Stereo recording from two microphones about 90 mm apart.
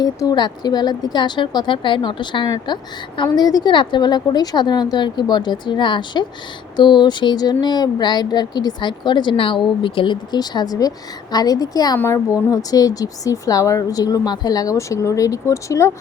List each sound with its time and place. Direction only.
0.0 s speech: 50° left (ahead or behind)
3.3 s a woman's voice: 50° left (ahead or behind)
11.9 s a woman's voice: 25° left (ahead or behind)
12.5 s speech: 45° left (ahead or behind)